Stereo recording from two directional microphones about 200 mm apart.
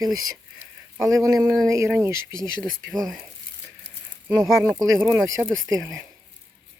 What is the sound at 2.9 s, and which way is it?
Speech, centre (ahead or behind).